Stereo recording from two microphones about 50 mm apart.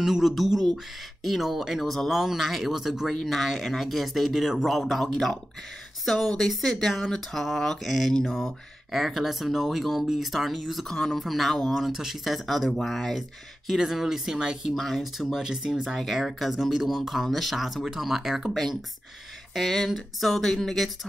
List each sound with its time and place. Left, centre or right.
0.0 s speech: centre
11.7 s speech: centre
14.8 s speech: centre
15.3 s speech: centre
19.5 s speech: centre